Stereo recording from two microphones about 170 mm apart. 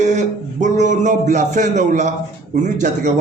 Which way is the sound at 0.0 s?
45° right (ahead or behind).